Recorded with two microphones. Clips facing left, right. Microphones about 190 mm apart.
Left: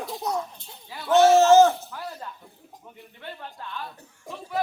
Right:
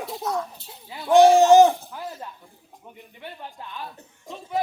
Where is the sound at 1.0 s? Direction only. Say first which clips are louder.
Right 2 dB; 15° right (ahead or behind).